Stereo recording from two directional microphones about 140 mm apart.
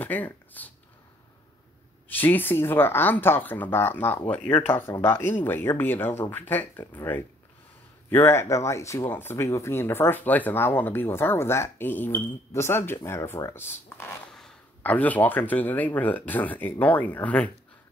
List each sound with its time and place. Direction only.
0.0 s speech: 10° left (ahead or behind)
2.0 s speech: 15° left (ahead or behind)